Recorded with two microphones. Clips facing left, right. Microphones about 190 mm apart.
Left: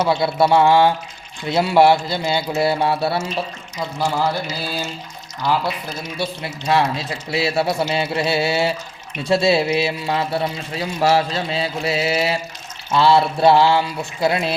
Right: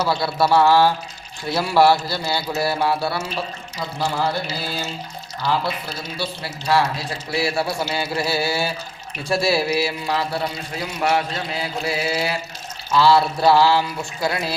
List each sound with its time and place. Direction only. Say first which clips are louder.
0.0 s speech: left 3 dB; 20° left (ahead or behind)
6.1 s speech: left 4 dB; 20° left (ahead or behind)